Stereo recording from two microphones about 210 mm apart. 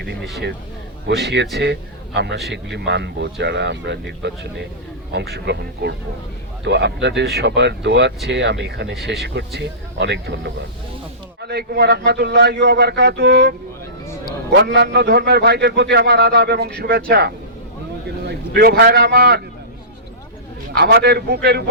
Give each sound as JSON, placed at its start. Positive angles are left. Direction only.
{"t": 1.0, "sound": "a man's voice", "side_deg": -55}
{"t": 14.5, "sound": "a man's voice", "side_deg": -55}
{"t": 20.7, "sound": "a man's voice", "side_deg": -50}